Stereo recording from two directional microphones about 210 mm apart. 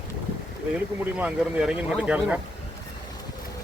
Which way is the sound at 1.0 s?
5° right (ahead or behind).